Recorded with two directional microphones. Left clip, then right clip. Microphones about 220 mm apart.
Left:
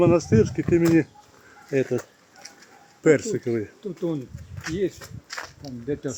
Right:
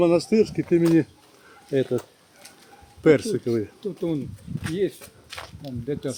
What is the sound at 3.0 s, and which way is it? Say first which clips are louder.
Speech: right 1 dB; 25° right (ahead or behind).